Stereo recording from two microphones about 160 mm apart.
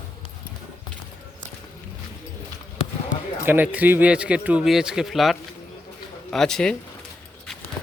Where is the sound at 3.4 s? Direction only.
10° right (ahead or behind); by 6.7 s 5° left (ahead or behind).